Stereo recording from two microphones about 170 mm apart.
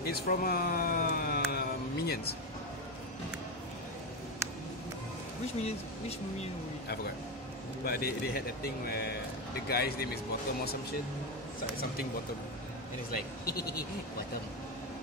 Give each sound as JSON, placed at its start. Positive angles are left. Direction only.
{"t": 0.0, "sound": "speech", "side_deg": 65}
{"t": 1.5, "sound": "a sound", "side_deg": 65}
{"t": 5.6, "sound": "speech", "side_deg": 40}
{"t": 7.8, "sound": "speech", "side_deg": 65}
{"t": 13.1, "sound": "speech", "side_deg": 65}